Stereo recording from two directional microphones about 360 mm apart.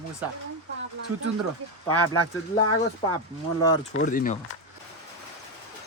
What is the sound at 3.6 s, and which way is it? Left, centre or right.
Speech, centre.